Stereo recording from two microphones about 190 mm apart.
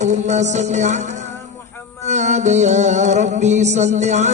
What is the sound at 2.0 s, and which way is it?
Music, 40° right (ahead or behind).